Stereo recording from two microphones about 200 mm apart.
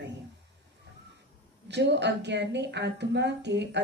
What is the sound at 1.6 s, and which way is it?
A woman's voice, 60° right (ahead or behind).